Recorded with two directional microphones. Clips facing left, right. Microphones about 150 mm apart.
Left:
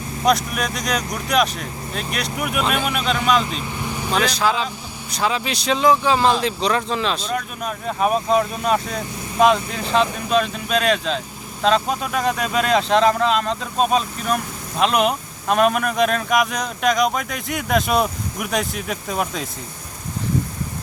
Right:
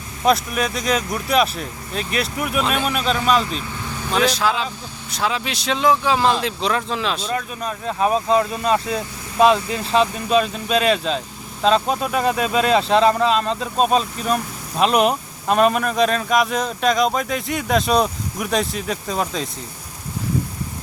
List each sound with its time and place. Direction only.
0.3 s speech: centre (ahead or behind)
3.7 s vehicle: 15° left (ahead or behind)
4.1 s speech: centre (ahead or behind)